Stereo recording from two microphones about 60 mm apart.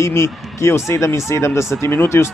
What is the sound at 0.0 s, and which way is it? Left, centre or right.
A man's voice, left.